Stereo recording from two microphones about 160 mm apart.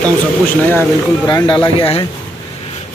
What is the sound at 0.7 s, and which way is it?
Speech, 10° left (ahead or behind).